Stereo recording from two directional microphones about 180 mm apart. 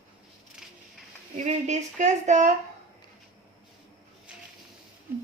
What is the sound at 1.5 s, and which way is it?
Speech, 40° right (ahead or behind).